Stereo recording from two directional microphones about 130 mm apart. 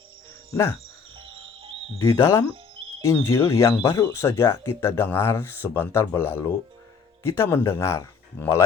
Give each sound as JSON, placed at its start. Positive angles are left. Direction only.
{"t": 1.2, "sound": "music", "side_deg": -45}
{"t": 2.0, "sound": "speech", "side_deg": 20}